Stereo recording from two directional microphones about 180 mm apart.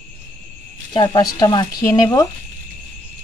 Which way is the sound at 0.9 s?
25° left (ahead or behind).